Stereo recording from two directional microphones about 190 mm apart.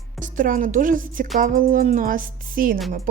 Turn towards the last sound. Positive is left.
turn(degrees=-35)  # may be behind; listen again after turning